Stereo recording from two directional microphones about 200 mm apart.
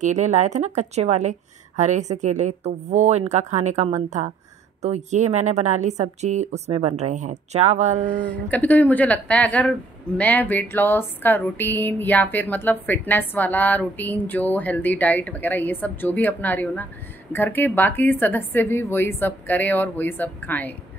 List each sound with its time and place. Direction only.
0.0 s a woman's voice: 35° right (ahead or behind)
8.2 s speech: 10° left (ahead or behind)